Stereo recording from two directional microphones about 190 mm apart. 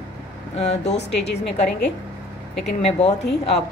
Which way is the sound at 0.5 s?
35° left (ahead or behind).